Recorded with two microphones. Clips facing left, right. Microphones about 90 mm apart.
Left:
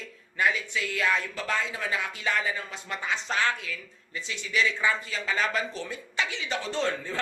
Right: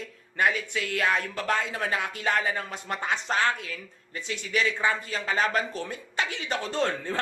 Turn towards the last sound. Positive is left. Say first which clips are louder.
# right 1 dB
turn(degrees=-45)  # may be behind; listen again after turning